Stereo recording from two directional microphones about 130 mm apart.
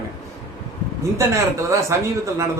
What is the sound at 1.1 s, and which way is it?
Speech, 20° right (ahead or behind).